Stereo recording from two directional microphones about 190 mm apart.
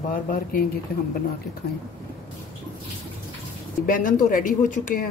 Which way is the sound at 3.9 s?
45° left (ahead or behind).